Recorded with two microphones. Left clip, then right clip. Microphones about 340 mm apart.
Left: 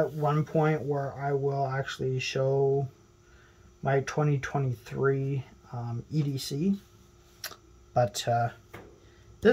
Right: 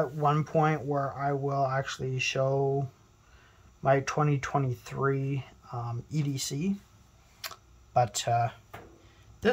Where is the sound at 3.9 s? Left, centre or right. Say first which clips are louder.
Right 2 dB; centre.